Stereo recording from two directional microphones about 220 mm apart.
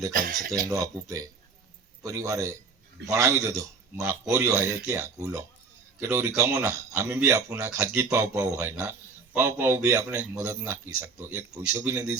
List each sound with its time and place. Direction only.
0.1 s speech: 40° right (ahead or behind)
0.7 s speech: 15° right (ahead or behind)